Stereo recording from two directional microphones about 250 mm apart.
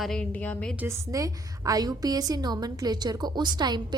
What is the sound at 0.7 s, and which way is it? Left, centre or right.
A woman's voice, centre.